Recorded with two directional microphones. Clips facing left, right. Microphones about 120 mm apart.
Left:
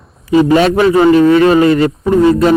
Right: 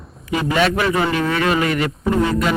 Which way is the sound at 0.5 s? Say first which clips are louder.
Left 5 dB; 35° left (ahead or behind).